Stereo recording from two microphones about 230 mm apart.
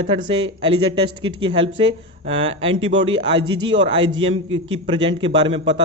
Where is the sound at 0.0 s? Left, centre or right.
Right.